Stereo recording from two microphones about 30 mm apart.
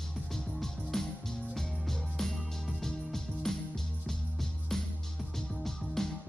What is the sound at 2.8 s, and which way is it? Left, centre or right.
Music, centre.